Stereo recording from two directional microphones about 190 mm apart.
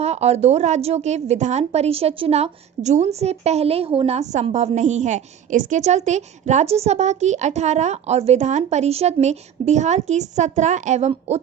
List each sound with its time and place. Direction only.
0.0 s a woman's voice: 35° right (ahead or behind)